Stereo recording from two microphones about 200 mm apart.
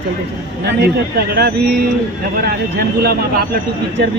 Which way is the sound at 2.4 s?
50° right (ahead or behind).